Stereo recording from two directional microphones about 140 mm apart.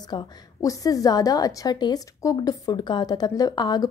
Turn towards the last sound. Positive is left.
turn(degrees=30)  # may be behind; listen again after turning